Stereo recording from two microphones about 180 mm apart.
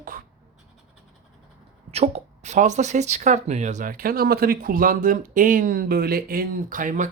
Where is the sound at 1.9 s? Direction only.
35° right (ahead or behind).